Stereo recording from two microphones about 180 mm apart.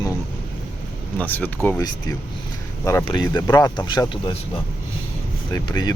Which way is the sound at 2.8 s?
15° left (ahead or behind).